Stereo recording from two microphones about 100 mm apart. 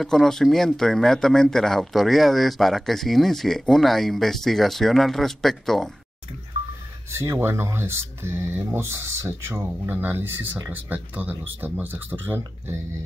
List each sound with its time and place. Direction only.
0.0 s speech: 5° left (ahead or behind)
7.2 s speech: 25° right (ahead or behind)